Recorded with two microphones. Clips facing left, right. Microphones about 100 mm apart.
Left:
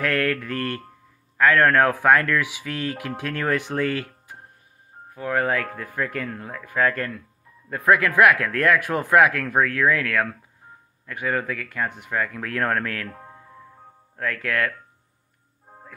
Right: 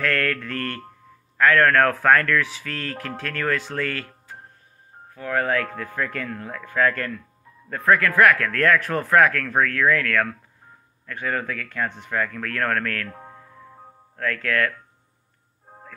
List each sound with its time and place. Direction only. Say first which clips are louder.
0.0 s speech: left 1 dB; 15° left (ahead or behind)
14.1 s speech: right 1 dB; 15° left (ahead or behind)